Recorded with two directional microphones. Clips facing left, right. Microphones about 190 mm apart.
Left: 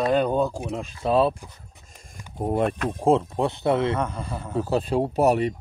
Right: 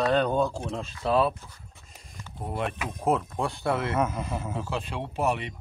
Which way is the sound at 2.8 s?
30° left (ahead or behind).